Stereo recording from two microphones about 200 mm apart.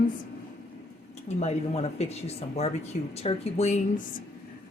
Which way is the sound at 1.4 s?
30° left (ahead or behind).